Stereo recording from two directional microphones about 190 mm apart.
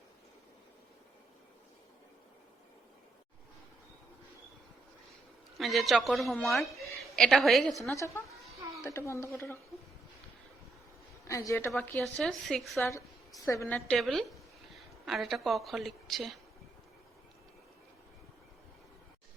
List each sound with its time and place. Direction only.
5.5 s a woman's voice: centre (ahead or behind)
7.9 s a woman's voice: 15° left (ahead or behind)
11.3 s a woman's voice: 15° left (ahead or behind)
13.4 s a woman's voice: 15° left (ahead or behind)